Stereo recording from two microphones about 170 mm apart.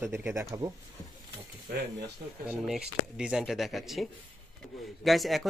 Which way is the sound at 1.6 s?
75° right (ahead or behind).